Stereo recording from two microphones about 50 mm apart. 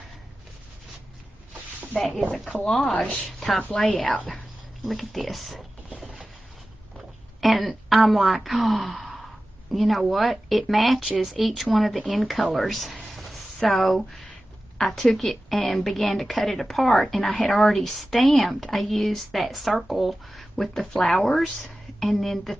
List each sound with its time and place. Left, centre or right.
2.8 s speech: centre
3.3 s a woman's voice: centre
5.9 s vehicle: centre
7.3 s a woman's voice: centre